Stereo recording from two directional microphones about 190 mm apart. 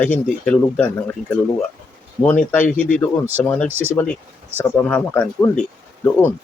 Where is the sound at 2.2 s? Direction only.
10° left (ahead or behind).